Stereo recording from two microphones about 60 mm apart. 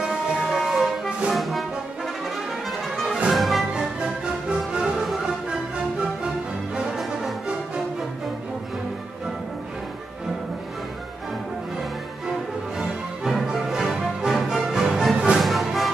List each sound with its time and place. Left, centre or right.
0.0 s music: centre
1.3 s brass instrument: centre
2.9 s music: centre
3.7 s music: centre
12.7 s music: centre